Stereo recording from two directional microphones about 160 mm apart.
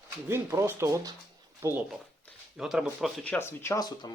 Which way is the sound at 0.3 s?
15° right (ahead or behind).